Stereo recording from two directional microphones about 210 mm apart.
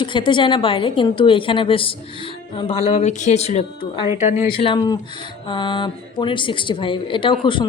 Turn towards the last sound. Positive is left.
turn(degrees=25)  # may be behind; listen again after turning